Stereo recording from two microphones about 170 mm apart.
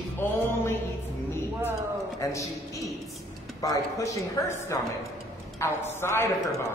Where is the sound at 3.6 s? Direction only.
20° left (ahead or behind).